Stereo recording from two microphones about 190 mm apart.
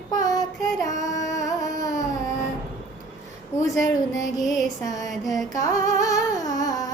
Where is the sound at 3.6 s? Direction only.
15° left (ahead or behind).